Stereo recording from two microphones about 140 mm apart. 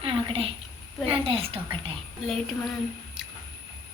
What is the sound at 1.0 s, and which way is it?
Speech, 40° right (ahead or behind).